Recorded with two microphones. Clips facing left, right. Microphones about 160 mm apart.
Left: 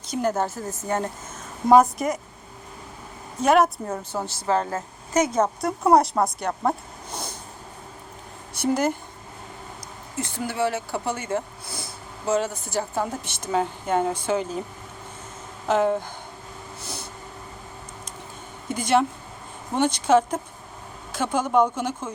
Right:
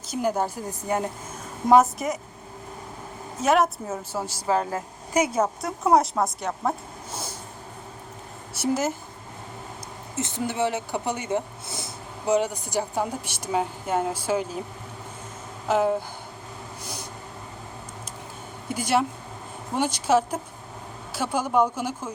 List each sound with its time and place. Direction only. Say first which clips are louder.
0.1 s speech: left 1 dB; 10° right (ahead or behind)
1.7 s a woman's voice: left 2 dB; centre (ahead or behind)
3.4 s speech: left 2 dB; centre (ahead or behind)
8.6 s a woman's voice: left 2 dB; 5° right (ahead or behind)
10.2 s speech: even; 20° right (ahead or behind)
15.6 s speech: left 1 dB; 5° right (ahead or behind)
18.7 s speech: left 3 dB; 10° right (ahead or behind)